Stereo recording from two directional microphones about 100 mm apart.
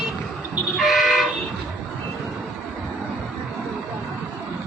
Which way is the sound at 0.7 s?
Centre (ahead or behind).